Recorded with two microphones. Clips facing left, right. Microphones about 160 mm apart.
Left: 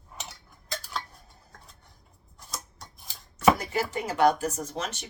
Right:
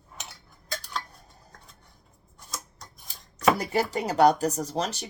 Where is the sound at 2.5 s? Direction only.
Centre (ahead or behind).